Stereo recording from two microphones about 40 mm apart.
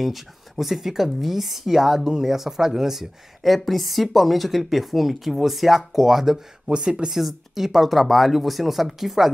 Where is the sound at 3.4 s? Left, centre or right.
Centre.